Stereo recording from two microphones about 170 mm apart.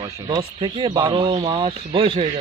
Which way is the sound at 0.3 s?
30° right (ahead or behind).